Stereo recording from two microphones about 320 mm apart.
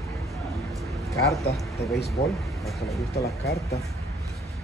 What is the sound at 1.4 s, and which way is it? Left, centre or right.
Speech, left.